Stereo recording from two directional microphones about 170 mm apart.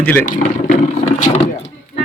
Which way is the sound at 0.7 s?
50° left (ahead or behind).